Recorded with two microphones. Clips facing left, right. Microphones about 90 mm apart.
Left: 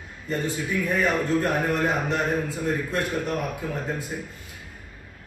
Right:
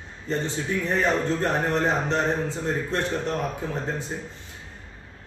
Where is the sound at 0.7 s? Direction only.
30° right (ahead or behind).